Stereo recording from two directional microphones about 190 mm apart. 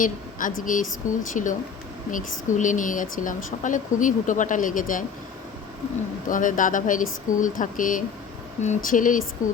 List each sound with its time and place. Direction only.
0.0 s a woman's voice: 45° left (ahead or behind)
6.2 s speech: 45° left (ahead or behind)